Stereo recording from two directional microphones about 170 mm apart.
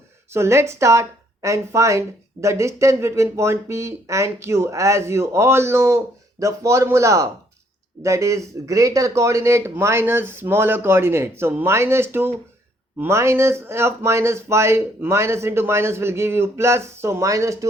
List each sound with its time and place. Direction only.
0.3 s speech: 15° right (ahead or behind)